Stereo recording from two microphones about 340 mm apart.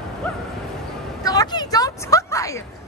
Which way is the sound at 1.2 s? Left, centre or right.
Centre.